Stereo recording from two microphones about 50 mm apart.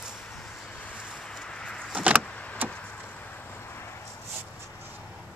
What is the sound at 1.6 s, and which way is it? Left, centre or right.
Vehicle, centre.